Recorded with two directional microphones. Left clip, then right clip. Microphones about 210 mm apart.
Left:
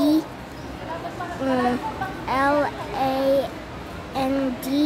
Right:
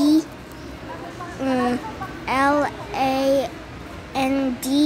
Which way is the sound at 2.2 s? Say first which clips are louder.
Right 2 dB; 20° right (ahead or behind).